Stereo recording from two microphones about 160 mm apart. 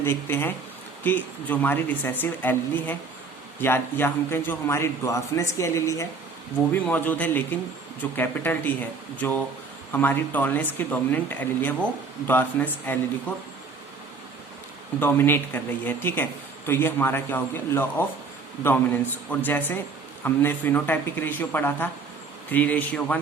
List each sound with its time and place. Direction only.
0.0 s a woman's voice: 15° left (ahead or behind)
15.0 s speech: 15° left (ahead or behind)